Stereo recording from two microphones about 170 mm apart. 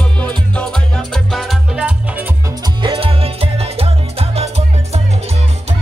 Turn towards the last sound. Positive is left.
turn(degrees=-35)  # may be behind; listen again after turning